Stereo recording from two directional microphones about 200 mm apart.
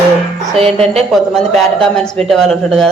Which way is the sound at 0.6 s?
30° right (ahead or behind).